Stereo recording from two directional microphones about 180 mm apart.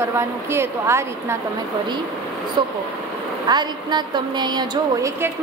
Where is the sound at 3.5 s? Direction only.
25° right (ahead or behind).